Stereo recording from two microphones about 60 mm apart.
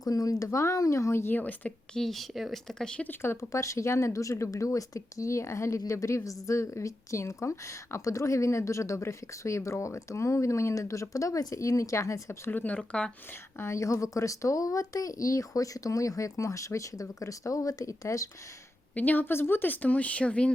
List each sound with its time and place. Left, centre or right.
0.0 s a woman's voice: left
1.4 s speech: left
1.9 s speech: centre
3.2 s a woman's voice: left
12.5 s speech: left
13.6 s a woman's voice: left
18.9 s speech: left